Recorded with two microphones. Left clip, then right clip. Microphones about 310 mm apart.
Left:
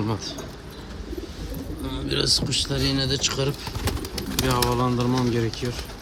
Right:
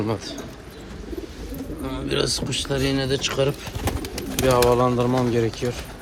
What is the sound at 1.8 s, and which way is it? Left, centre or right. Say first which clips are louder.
Speech: right 2 dB; centre.